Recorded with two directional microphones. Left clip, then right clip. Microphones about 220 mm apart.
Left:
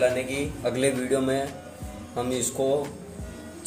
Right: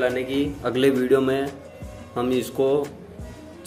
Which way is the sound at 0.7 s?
40° right (ahead or behind).